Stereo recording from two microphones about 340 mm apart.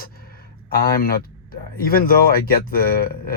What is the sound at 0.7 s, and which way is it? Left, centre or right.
Speech, left.